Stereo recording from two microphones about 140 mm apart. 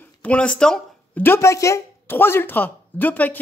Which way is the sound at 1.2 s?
20° left (ahead or behind).